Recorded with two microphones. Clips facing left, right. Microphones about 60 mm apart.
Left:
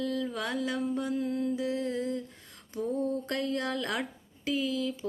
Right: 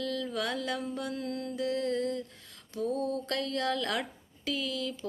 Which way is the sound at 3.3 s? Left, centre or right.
Centre.